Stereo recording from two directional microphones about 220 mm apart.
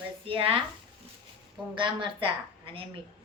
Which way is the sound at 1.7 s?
20° right (ahead or behind).